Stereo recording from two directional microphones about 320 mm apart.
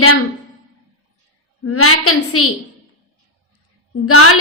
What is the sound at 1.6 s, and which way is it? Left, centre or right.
Speech, left.